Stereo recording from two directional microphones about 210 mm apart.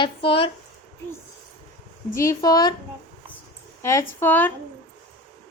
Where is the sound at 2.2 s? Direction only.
15° left (ahead or behind).